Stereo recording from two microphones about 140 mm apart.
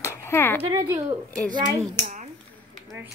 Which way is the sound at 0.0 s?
20° left (ahead or behind).